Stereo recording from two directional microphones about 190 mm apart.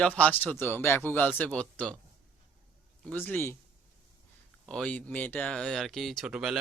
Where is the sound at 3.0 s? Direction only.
5° left (ahead or behind).